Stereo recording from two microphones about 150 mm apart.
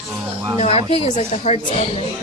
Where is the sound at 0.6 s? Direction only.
40° left (ahead or behind).